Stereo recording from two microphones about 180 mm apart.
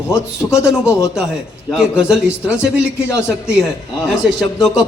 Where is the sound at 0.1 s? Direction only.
15° left (ahead or behind).